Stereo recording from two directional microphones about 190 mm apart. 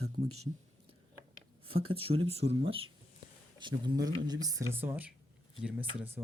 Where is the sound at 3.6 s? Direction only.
25° right (ahead or behind).